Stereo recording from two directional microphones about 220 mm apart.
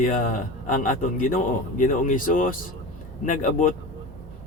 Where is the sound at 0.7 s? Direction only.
40° left (ahead or behind).